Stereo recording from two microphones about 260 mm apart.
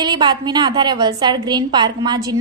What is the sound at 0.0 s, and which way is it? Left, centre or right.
A woman's voice, centre.